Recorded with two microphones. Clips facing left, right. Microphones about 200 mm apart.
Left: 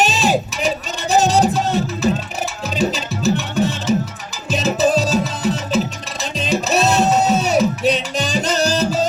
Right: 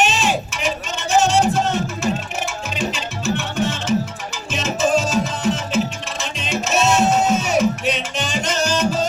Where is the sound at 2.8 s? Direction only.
35° left (ahead or behind).